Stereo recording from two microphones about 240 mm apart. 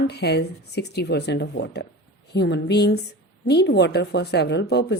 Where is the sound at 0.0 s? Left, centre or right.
Left.